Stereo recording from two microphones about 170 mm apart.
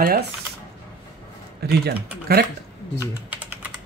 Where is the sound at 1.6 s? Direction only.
70° right (ahead or behind).